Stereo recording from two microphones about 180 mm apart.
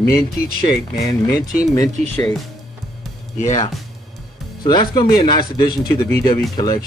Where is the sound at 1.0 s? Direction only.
20° left (ahead or behind).